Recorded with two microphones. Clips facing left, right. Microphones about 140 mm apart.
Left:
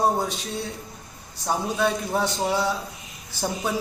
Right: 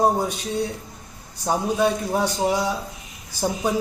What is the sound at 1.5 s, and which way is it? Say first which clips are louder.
A man's voice: right 3 dB; 15° right (ahead or behind).